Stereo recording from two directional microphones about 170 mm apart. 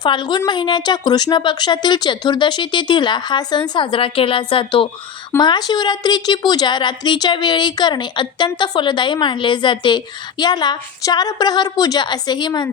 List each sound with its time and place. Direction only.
0.0 s a woman's voice: 25° left (ahead or behind)